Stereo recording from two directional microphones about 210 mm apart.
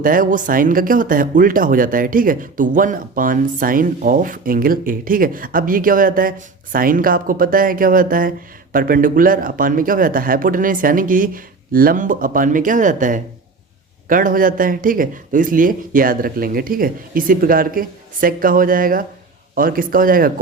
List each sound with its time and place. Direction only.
0.0 s speech: 40° right (ahead or behind)